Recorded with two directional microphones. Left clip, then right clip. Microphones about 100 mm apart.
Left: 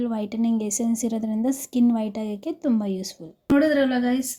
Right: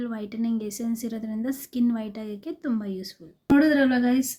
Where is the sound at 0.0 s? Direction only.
35° left (ahead or behind).